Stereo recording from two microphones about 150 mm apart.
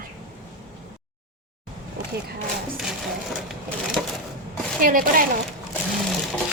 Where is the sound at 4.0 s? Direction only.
Centre (ahead or behind).